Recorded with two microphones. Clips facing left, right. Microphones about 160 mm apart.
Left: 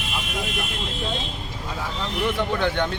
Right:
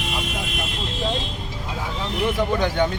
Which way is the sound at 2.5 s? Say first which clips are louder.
Right 2 dB; 10° right (ahead or behind).